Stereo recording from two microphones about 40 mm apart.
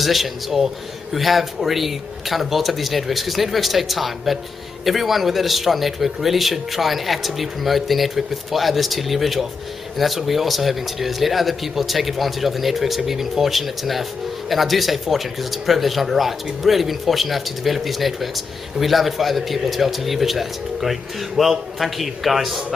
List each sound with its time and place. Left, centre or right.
0.0 s speech: centre